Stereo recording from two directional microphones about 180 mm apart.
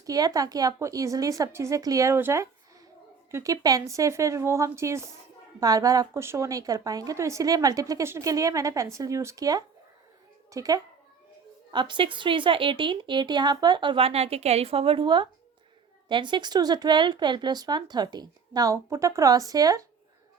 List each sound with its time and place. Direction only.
0.0 s a woman's voice: 20° right (ahead or behind)